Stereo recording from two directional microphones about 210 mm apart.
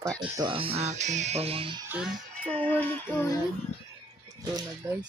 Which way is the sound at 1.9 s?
5° right (ahead or behind).